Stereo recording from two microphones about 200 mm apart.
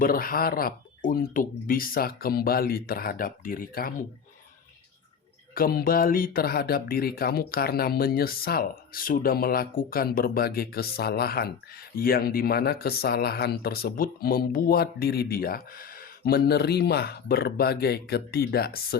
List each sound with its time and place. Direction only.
0.0 s speech: 45° left (ahead or behind)
5.5 s speech: 45° left (ahead or behind)